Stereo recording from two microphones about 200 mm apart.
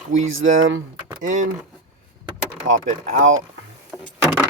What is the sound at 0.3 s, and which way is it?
Speech, 80° right.